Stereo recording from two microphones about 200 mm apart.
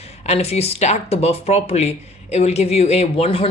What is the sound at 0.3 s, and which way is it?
Speech, 30° left (ahead or behind).